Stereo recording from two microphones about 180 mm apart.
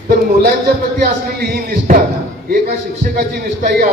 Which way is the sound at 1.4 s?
60° right (ahead or behind).